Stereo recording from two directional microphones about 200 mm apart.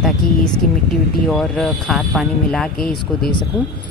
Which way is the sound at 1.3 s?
5° left (ahead or behind).